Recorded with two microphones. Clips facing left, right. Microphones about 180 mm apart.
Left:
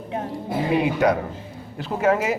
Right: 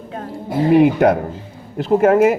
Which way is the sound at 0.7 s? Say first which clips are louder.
Right 8 dB; 55° right (ahead or behind).